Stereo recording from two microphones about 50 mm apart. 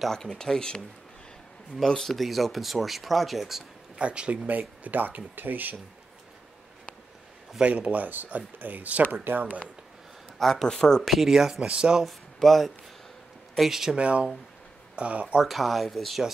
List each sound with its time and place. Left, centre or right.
0.1 s speech: centre
1.9 s speech: centre
4.0 s speech: right
4.5 s speech: right
7.6 s speech: right
10.4 s speech: centre
11.2 s speech: centre
12.4 s speech: centre
13.6 s speech: centre
13.9 s speech: right
15.4 s speech: centre